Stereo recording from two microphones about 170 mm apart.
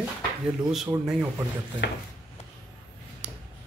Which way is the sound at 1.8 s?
90° left.